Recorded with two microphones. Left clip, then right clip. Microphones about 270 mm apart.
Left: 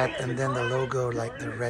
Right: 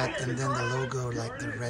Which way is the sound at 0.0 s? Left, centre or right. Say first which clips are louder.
Left 3 dB; centre.